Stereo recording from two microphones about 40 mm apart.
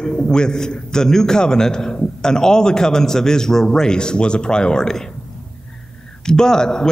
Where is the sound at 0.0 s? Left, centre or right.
Left.